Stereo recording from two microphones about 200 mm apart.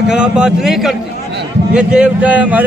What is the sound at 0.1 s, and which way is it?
A man's voice, 5° right (ahead or behind).